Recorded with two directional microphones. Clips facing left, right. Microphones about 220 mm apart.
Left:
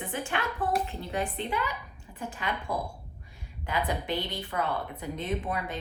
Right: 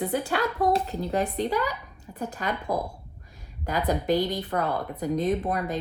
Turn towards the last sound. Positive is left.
turn(degrees=-40)  # may be behind; listen again after turning